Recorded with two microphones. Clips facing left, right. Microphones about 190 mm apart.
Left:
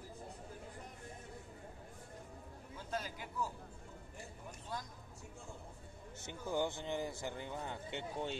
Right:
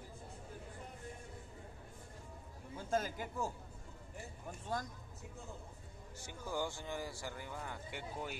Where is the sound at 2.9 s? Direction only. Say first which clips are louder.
Right 5 dB; 50° right (ahead or behind).